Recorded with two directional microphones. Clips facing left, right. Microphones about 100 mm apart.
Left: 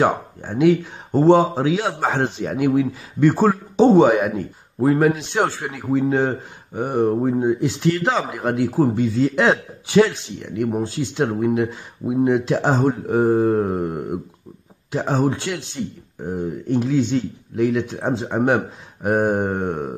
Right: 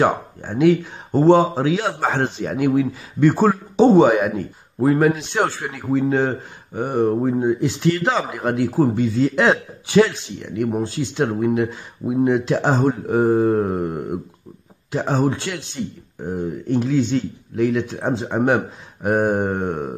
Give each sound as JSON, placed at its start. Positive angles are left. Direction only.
{"t": 0.0, "sound": "speech", "side_deg": 5}